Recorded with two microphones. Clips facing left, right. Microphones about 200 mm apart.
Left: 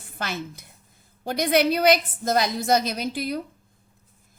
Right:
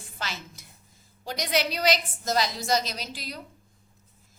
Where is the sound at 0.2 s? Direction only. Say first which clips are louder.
Left 6 dB; 55° left (ahead or behind).